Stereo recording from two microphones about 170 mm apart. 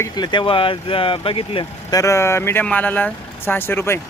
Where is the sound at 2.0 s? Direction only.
15° left (ahead or behind).